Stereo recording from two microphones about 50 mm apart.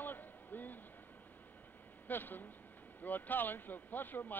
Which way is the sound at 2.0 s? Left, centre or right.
Left.